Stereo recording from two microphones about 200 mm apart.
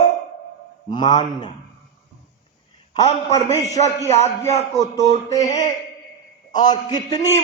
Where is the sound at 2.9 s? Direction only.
20° left (ahead or behind).